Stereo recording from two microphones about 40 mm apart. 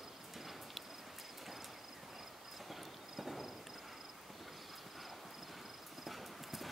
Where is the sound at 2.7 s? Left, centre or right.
Centre.